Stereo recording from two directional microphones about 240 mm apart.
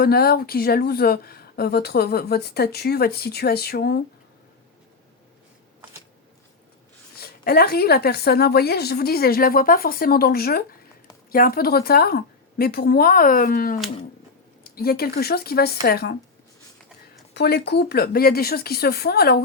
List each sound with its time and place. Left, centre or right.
0.0 s speech: left
7.2 s speech: left
17.3 s speech: left